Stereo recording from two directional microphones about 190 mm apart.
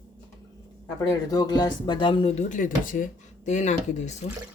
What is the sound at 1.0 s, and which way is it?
Speech, 20° left (ahead or behind).